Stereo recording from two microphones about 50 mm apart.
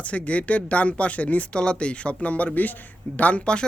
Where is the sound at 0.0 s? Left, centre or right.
Left.